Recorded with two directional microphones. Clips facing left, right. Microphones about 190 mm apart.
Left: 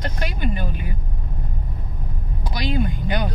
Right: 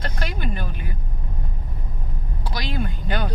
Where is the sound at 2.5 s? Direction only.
15° left (ahead or behind).